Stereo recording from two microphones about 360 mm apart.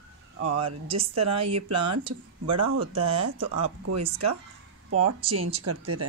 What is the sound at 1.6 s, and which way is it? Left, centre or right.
Speech, right.